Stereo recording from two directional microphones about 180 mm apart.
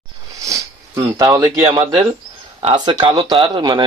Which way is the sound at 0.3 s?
20° right (ahead or behind).